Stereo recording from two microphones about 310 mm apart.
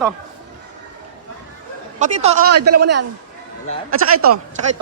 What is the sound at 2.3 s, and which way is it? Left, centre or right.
Speech, right.